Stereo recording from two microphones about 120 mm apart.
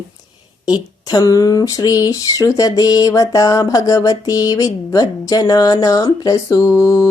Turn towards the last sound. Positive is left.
turn(degrees=30)  # may be behind; listen again after turning